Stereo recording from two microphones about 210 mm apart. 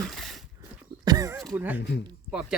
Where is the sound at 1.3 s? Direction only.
Centre (ahead or behind).